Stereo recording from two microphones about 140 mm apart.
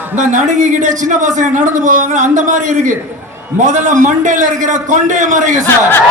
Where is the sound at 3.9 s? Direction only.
65° right (ahead or behind).